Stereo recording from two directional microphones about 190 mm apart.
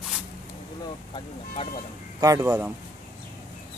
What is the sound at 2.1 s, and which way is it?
Speech, 15° right (ahead or behind).